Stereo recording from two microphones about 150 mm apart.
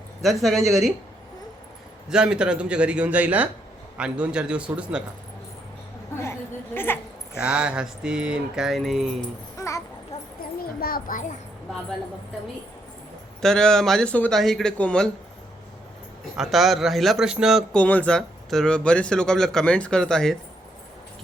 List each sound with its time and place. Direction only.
0.2 s a man's voice: centre (ahead or behind)
2.0 s a man's voice: 5° right (ahead or behind)
6.7 s a woman's voice: 15° left (ahead or behind)
7.3 s a man's voice: 5° right (ahead or behind)
9.6 s a sound: 20° left (ahead or behind)
10.8 s a child's voice: 75° left (ahead or behind); by 11.3 s 60° left (ahead or behind)
13.4 s a man's voice: 5° left (ahead or behind)
16.4 s a man's voice: centre (ahead or behind)